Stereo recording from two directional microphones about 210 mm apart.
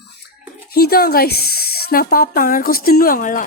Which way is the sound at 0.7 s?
45° left (ahead or behind).